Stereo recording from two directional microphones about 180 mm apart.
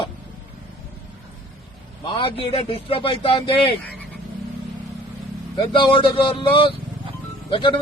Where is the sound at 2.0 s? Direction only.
30° left (ahead or behind).